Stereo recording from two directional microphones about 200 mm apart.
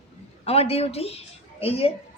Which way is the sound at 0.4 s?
30° left (ahead or behind).